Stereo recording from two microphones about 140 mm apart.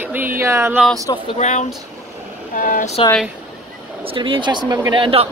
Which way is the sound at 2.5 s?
70° left (ahead or behind).